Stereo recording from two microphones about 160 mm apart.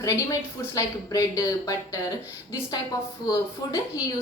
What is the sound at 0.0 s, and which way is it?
A woman's voice, 20° left (ahead or behind).